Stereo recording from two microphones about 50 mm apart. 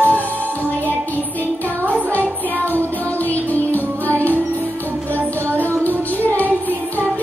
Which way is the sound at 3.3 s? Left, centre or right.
Left.